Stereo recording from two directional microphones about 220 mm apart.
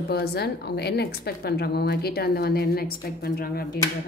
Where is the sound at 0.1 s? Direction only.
45° left (ahead or behind).